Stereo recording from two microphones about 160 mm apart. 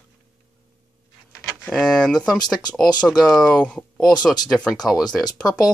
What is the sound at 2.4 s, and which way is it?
Speech, 25° left (ahead or behind).